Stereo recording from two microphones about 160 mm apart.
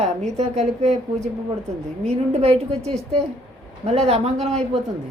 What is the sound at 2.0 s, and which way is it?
A woman's voice, 40° right (ahead or behind).